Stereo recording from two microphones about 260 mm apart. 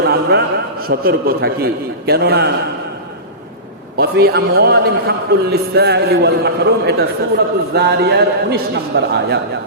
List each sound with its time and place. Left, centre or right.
0.0 s a man's voice: right
3.9 s a man's voice: right